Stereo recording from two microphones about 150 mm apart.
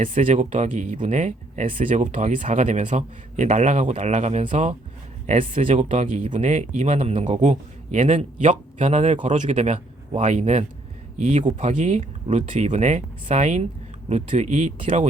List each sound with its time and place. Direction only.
0.2 s speech: 60° right (ahead or behind)